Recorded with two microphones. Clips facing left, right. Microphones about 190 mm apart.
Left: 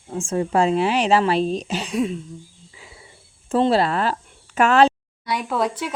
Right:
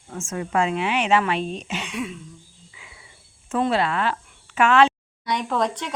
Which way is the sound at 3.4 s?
35° left (ahead or behind).